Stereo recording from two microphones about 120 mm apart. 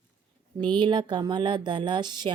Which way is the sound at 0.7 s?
40° right (ahead or behind).